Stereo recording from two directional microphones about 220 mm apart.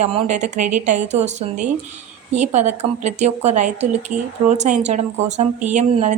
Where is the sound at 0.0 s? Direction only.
30° right (ahead or behind).